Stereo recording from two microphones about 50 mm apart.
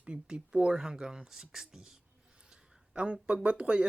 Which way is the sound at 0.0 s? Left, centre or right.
Right.